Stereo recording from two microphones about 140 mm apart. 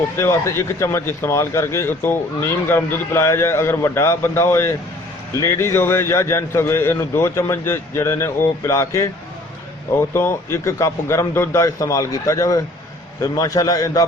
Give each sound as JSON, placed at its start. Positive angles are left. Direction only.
{"t": 0.2, "sound": "speech", "side_deg": 20}
{"t": 10.2, "sound": "speech", "side_deg": 20}